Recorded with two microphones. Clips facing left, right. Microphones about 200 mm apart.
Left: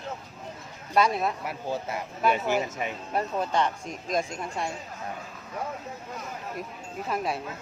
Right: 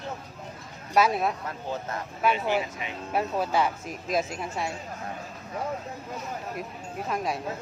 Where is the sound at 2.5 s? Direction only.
45° left (ahead or behind).